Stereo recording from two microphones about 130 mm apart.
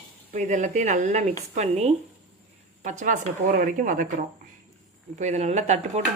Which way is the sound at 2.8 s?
80° right.